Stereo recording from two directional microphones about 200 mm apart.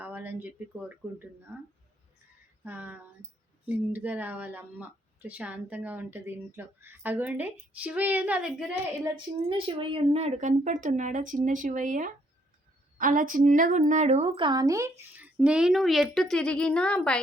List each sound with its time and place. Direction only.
0.0 s a sound: 10° right (ahead or behind)
2.6 s speech: 10° right (ahead or behind)
9.1 s speech: 25° right (ahead or behind); by 17.2 s 5° left (ahead or behind)